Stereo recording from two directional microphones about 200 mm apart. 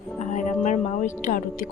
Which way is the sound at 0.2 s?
35° left (ahead or behind).